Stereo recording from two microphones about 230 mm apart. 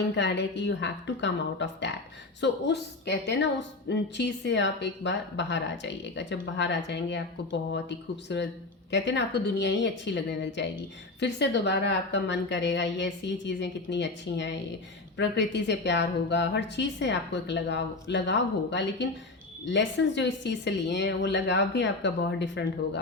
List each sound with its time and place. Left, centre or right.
0.2 s a woman's voice: left